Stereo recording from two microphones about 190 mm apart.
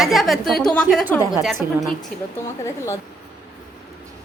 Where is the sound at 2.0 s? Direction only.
15° left (ahead or behind).